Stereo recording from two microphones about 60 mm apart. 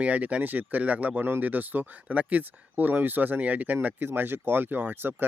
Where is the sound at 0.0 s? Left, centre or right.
Right.